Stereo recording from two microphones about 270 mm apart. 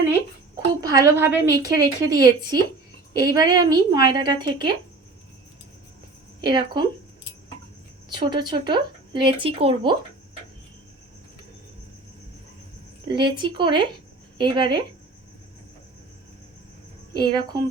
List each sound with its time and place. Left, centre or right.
0.8 s a woman's voice: centre
6.4 s speech: centre
8.1 s speech: centre
13.1 s speech: centre
17.2 s speech: centre